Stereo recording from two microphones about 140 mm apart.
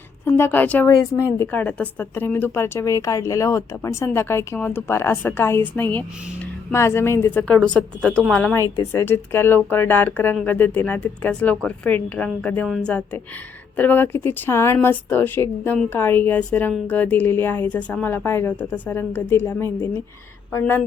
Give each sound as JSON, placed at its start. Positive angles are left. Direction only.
{"t": 0.3, "sound": "speech", "side_deg": 15}
{"t": 8.5, "sound": "speech", "side_deg": 20}